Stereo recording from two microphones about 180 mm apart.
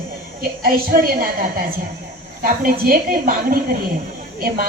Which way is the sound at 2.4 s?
55° right (ahead or behind).